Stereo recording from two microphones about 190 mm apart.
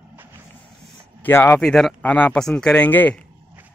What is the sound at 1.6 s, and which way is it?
Speech, centre (ahead or behind).